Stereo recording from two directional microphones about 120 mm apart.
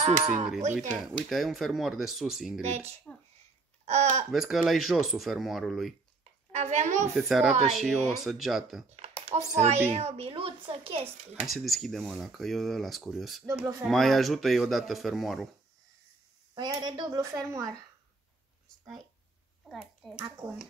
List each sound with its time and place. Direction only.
0.0 s speech: 65° right (ahead or behind)
1.1 s speech: centre (ahead or behind)
2.6 s speech: 65° right (ahead or behind)
4.3 s speech: centre (ahead or behind)
6.5 s a woman's voice: 65° right (ahead or behind)
7.2 s speech: centre (ahead or behind)
9.2 s speech: 65° right (ahead or behind); by 11.1 s 50° right (ahead or behind)
11.4 s speech: centre (ahead or behind)
16.5 s speech: 35° right (ahead or behind)
20.1 s speech: 5° right (ahead or behind)